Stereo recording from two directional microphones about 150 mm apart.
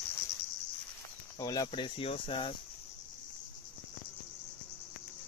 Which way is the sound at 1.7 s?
40° left (ahead or behind).